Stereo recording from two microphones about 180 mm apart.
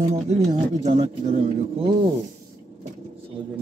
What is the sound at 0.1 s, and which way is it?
Speech, 40° right (ahead or behind).